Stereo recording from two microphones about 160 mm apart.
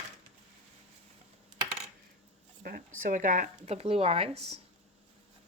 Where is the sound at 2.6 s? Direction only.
65° right (ahead or behind).